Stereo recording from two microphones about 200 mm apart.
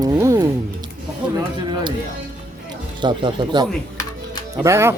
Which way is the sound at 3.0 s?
20° right (ahead or behind).